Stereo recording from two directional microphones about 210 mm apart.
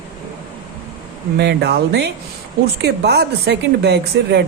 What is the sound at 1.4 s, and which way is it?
Speech, 55° right (ahead or behind).